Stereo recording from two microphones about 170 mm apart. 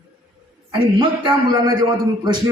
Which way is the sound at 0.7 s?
30° right (ahead or behind).